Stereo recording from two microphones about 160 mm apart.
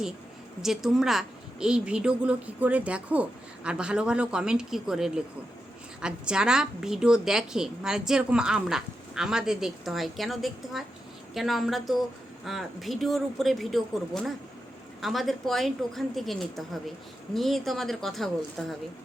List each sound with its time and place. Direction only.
0.6 s a woman's voice: 5° right (ahead or behind)